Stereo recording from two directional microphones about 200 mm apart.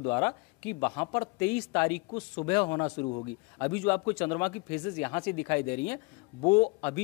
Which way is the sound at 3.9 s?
10° left (ahead or behind).